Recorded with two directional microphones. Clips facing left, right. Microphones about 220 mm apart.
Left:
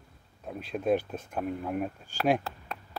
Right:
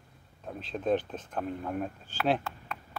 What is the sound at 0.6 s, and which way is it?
Speech, 10° left (ahead or behind).